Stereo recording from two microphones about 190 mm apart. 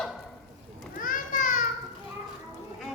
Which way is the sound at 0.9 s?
45° left (ahead or behind).